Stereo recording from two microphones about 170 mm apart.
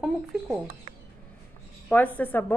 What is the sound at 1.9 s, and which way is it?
Speech, 10° left (ahead or behind).